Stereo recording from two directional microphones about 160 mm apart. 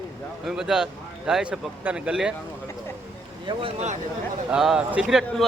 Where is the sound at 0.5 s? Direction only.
5° right (ahead or behind).